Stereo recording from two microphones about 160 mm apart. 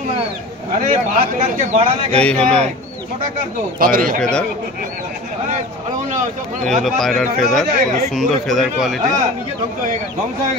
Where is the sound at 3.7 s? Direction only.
60° right (ahead or behind).